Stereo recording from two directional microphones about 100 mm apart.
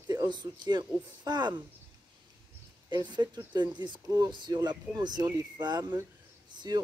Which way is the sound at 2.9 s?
45° right (ahead or behind).